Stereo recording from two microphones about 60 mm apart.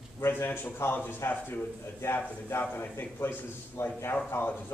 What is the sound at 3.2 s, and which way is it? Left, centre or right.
Speech, left.